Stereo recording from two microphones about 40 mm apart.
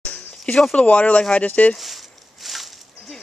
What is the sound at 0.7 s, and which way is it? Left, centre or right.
Speech, left.